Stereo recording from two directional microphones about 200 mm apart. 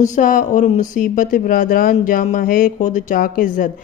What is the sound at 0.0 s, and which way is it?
Speech, 40° left (ahead or behind).